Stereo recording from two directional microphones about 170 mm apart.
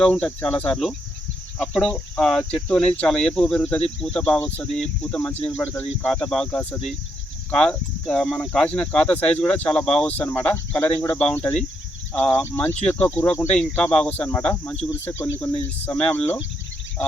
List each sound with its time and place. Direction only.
0.0 s speech: 5° left (ahead or behind)